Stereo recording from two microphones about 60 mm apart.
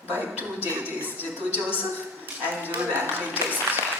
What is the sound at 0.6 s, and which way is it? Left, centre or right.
Speech, right.